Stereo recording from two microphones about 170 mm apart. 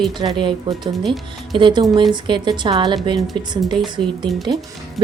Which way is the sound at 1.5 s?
30° right (ahead or behind).